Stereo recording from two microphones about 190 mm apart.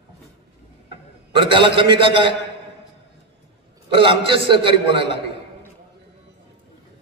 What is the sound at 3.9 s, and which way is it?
Speech, 25° right (ahead or behind).